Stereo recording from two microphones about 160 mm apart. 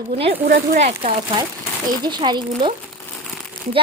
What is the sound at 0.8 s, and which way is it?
Speech, 45° right (ahead or behind).